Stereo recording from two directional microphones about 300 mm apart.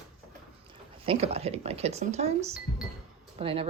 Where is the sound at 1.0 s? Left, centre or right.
Centre.